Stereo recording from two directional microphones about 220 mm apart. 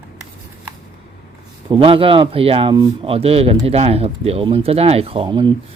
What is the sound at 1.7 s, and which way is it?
Speech, 25° right (ahead or behind).